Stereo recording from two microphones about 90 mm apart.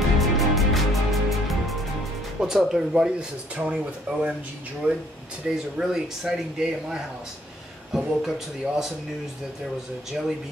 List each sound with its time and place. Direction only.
0.2 s music: centre (ahead or behind)
2.4 s speech: 5° right (ahead or behind)